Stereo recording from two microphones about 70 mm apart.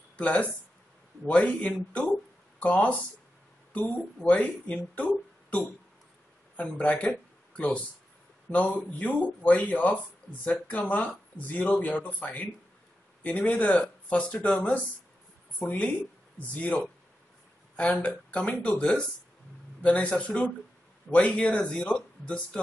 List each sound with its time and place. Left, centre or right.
0.2 s speech: centre
4.3 s speech: left
6.8 s speech: centre